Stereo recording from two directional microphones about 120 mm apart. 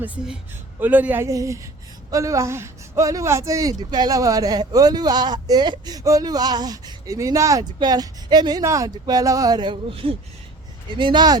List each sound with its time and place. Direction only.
0.8 s speech: 15° right (ahead or behind); by 11.3 s 40° right (ahead or behind)